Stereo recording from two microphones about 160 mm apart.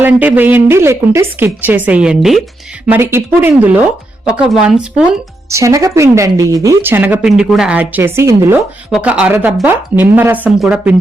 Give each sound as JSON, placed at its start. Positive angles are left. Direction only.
{"t": 0.0, "sound": "speech", "side_deg": -10}
{"t": 4.3, "sound": "speech", "side_deg": -5}
{"t": 5.5, "sound": "speech", "side_deg": -20}
{"t": 8.5, "sound": "speech", "side_deg": -5}